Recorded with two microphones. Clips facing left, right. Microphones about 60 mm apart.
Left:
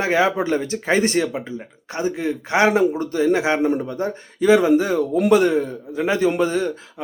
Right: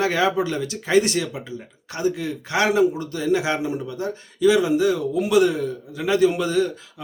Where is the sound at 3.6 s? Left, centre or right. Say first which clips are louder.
Left 5 dB; left.